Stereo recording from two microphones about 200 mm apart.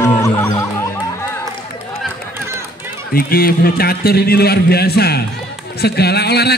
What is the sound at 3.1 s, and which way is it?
A man's voice, 50° left (ahead or behind).